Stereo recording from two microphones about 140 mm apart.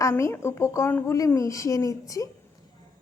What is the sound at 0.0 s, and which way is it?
A woman's voice, 20° left (ahead or behind).